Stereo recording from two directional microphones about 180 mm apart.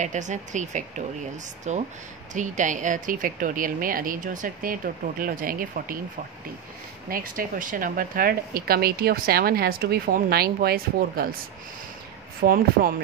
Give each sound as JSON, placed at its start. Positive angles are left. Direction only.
{"t": 0.0, "sound": "a woman's voice", "side_deg": -40}
{"t": 7.1, "sound": "a woman's voice", "side_deg": -50}
{"t": 12.4, "sound": "a woman's voice", "side_deg": -55}